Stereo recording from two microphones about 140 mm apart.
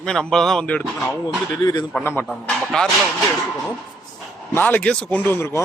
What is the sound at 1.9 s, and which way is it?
Speech, 15° left (ahead or behind).